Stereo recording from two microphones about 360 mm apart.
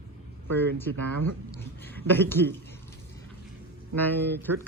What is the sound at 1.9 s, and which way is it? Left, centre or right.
Speech, centre.